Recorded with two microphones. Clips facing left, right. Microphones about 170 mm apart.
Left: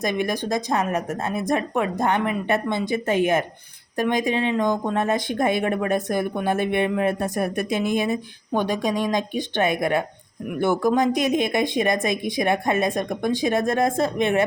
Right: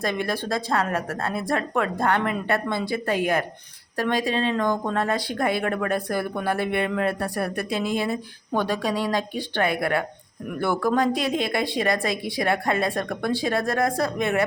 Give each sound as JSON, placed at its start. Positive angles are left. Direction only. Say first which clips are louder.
{"t": 0.0, "sound": "speech", "louder": "left 2 dB", "side_deg": 20}